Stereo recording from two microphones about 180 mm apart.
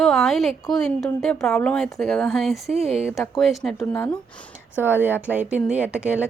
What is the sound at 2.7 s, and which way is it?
Speech, 35° right (ahead or behind).